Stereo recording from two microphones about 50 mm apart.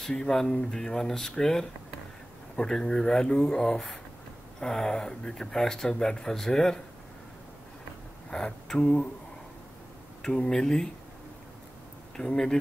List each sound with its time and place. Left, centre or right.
0.2 s speech: centre
8.3 s speech: centre
10.2 s speech: centre
12.2 s speech: centre